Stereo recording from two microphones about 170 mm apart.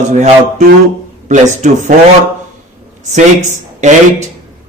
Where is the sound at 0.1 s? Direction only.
40° right (ahead or behind).